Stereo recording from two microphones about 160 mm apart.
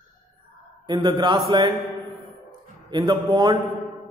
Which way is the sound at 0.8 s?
25° right (ahead or behind).